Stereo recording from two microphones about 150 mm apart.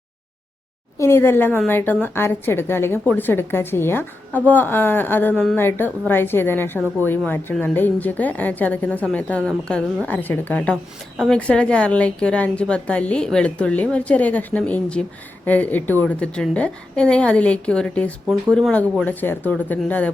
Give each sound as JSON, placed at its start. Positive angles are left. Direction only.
{"t": 0.9, "sound": "a woman's voice", "side_deg": 20}